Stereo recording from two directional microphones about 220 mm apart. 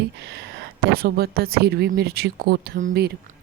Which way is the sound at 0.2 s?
50° right (ahead or behind).